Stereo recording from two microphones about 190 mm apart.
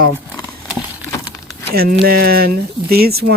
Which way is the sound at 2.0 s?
50° right (ahead or behind).